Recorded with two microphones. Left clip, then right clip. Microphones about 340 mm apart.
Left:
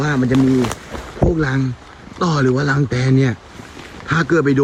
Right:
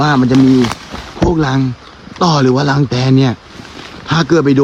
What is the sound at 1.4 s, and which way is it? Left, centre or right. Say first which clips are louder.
A man's voice: right 5 dB; centre.